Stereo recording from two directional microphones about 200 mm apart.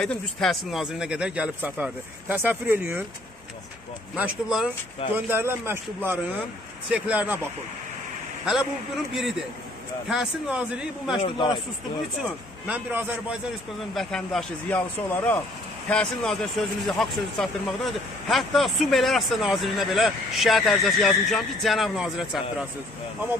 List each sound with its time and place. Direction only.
0.0 s speech: 5° left (ahead or behind)
4.1 s a man's voice: centre (ahead or behind)
9.1 s a man's voice: centre (ahead or behind)
11.2 s speech: 25° left (ahead or behind)
12.6 s a man's voice: 5° right (ahead or behind)